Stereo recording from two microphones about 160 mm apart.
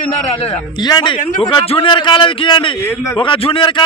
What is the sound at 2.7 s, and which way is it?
Speech, 10° left (ahead or behind).